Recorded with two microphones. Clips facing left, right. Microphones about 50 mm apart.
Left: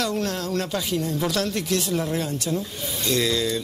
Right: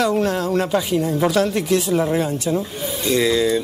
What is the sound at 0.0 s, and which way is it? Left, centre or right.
Speech, centre.